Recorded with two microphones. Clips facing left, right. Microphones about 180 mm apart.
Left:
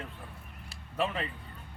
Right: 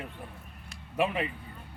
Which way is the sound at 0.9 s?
15° right (ahead or behind).